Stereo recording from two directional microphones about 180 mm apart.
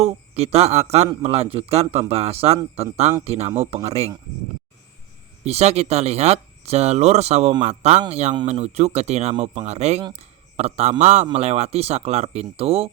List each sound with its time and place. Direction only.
0.0 s speech: 35° right (ahead or behind)
5.5 s speech: 35° right (ahead or behind)